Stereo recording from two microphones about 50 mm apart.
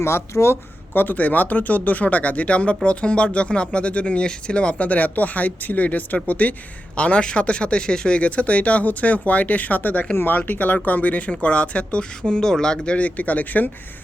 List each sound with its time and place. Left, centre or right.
0.0 s speech: left
0.9 s speech: left